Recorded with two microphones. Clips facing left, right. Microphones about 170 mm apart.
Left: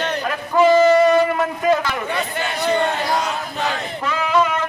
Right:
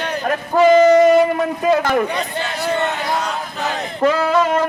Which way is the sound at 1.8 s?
50° right (ahead or behind).